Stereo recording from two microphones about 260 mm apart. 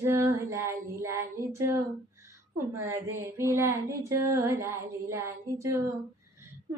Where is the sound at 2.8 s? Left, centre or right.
Centre.